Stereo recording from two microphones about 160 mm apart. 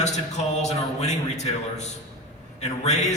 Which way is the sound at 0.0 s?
45° left (ahead or behind).